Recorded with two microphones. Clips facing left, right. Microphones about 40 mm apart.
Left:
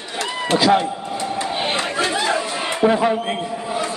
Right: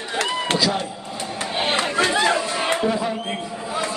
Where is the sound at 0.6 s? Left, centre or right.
Left.